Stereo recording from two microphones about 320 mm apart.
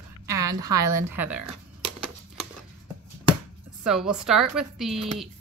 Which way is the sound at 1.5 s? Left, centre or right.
Right.